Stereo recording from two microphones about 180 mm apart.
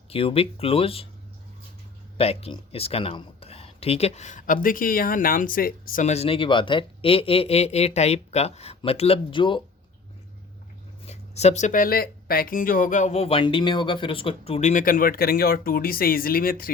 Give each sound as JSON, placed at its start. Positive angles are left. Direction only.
{"t": 0.1, "sound": "speech", "side_deg": 30}
{"t": 2.1, "sound": "speech", "side_deg": 35}
{"t": 11.0, "sound": "speech", "side_deg": 35}